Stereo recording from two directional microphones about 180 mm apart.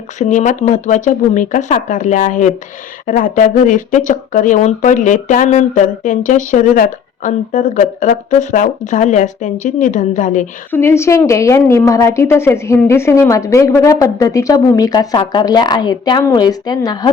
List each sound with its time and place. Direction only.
0.2 s speech: 45° left (ahead or behind)
10.7 s a woman's voice: 15° left (ahead or behind)